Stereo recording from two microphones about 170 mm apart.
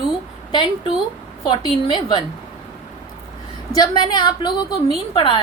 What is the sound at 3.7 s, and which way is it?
A woman's voice, 25° left (ahead or behind).